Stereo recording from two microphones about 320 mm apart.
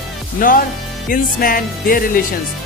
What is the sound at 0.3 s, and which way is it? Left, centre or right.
Speech, left.